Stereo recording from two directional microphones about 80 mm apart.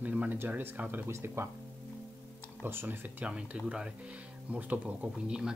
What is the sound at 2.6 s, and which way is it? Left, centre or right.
Speech, right.